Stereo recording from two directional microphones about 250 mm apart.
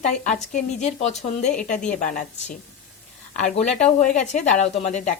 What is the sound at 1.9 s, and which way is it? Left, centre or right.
Speech, left.